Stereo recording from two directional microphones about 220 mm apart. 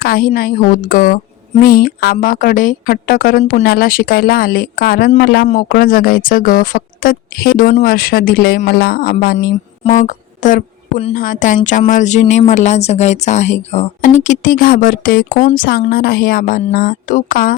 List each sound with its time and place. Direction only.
0.0 s speech: 40° left (ahead or behind)